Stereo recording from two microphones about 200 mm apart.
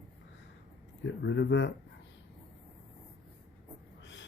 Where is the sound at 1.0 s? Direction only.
65° left (ahead or behind).